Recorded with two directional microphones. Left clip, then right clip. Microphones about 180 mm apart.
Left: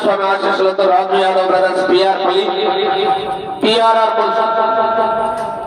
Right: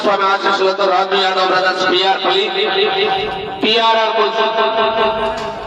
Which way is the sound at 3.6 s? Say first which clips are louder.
Left 1 dB; 40° left (ahead or behind).